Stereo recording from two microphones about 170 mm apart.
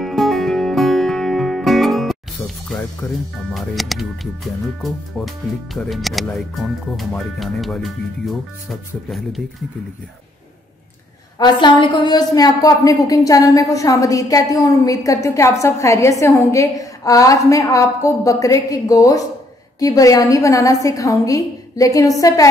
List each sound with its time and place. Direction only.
0.0 s music: centre (ahead or behind)
3.5 s speech: centre (ahead or behind)
11.3 s a woman's voice: 25° left (ahead or behind)